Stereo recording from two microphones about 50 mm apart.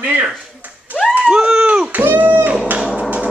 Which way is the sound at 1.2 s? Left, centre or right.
Right.